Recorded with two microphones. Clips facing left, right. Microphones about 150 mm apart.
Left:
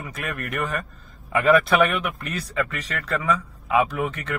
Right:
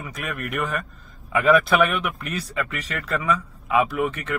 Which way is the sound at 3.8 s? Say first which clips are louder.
Right 2 dB; centre (ahead or behind).